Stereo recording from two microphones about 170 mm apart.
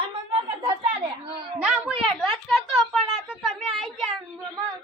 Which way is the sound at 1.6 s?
5° right (ahead or behind).